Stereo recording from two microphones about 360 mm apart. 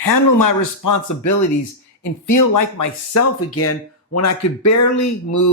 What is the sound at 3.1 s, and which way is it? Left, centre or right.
Speech, left.